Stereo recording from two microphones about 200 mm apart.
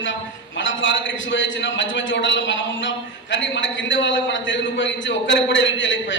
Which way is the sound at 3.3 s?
65° left (ahead or behind).